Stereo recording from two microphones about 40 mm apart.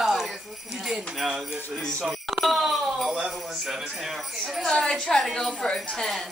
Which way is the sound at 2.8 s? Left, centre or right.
Centre.